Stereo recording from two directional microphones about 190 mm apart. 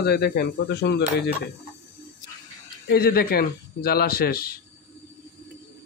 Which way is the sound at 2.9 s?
55° left (ahead or behind).